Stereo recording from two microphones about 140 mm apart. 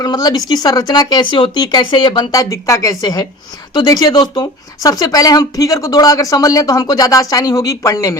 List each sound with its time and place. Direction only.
0.0 s speech: 30° left (ahead or behind)